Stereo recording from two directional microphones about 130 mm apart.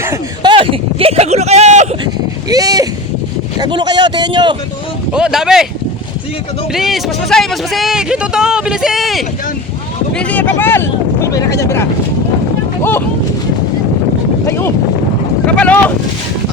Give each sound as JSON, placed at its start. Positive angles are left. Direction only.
{"t": 0.4, "sound": "a sound", "side_deg": -45}
{"t": 2.5, "sound": "a sound", "side_deg": -30}
{"t": 5.1, "sound": "speech", "side_deg": -5}
{"t": 6.7, "sound": "speech", "side_deg": 0}
{"t": 10.2, "sound": "speech", "side_deg": 10}
{"t": 14.4, "sound": "speech", "side_deg": 20}